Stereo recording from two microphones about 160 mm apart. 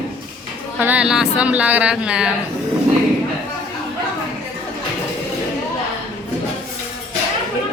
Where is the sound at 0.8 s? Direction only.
10° right (ahead or behind).